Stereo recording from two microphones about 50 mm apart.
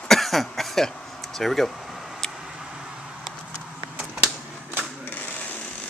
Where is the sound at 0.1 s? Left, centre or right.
Centre.